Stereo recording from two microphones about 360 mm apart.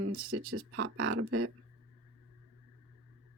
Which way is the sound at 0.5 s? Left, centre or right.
Right.